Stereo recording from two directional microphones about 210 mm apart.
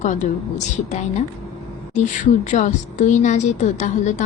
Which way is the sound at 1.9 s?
35° left (ahead or behind).